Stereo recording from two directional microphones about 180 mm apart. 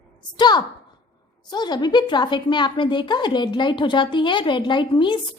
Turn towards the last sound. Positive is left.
turn(degrees=25)  # may be behind; listen again after turning